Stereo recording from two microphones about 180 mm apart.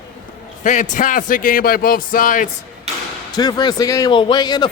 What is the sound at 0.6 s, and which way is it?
A man's voice, 40° left (ahead or behind).